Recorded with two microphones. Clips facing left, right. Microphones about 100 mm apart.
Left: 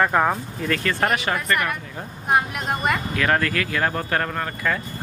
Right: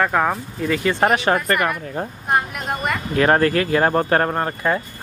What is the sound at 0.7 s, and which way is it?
Speech, 10° right (ahead or behind).